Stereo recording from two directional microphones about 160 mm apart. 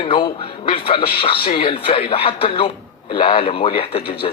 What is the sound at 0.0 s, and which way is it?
Speech, 35° left (ahead or behind).